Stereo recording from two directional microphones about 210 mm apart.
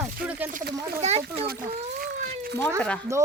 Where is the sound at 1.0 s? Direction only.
30° right (ahead or behind).